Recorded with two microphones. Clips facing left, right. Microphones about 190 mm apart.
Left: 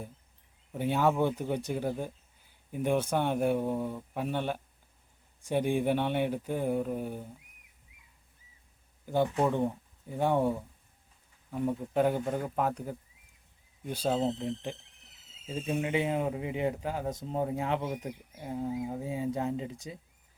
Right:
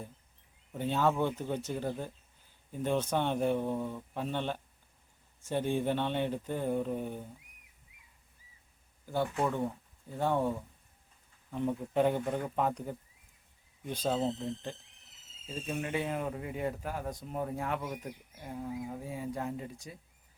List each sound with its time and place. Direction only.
0.7 s speech: 10° left (ahead or behind)
9.0 s speech: 15° left (ahead or behind)